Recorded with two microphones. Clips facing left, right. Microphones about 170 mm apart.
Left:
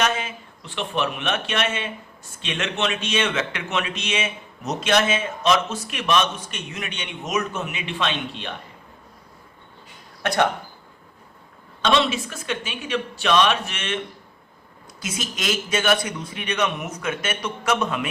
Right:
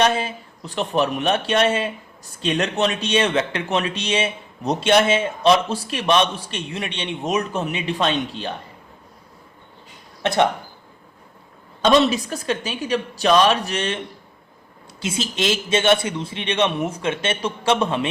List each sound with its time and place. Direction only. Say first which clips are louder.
0.0 s a man's voice: right 5 dB; 35° right (ahead or behind)
10.2 s a man's voice: right 3 dB; 25° right (ahead or behind)
11.9 s a man's voice: right 5 dB; 40° right (ahead or behind)
15.0 s a man's voice: right 5 dB; 30° right (ahead or behind)